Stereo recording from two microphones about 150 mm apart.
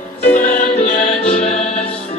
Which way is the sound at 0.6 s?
60° left (ahead or behind).